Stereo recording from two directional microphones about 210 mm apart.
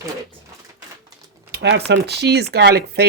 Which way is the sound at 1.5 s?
50° right (ahead or behind).